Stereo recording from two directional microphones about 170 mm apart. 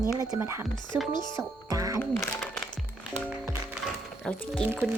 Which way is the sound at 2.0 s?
15° left (ahead or behind).